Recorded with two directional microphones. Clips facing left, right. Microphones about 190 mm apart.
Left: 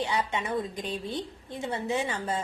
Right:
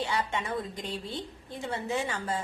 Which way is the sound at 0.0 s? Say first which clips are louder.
Left 2 dB; 20° left (ahead or behind).